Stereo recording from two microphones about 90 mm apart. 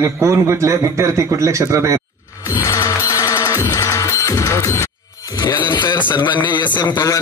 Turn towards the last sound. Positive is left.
turn(degrees=45)  # may be behind; listen again after turning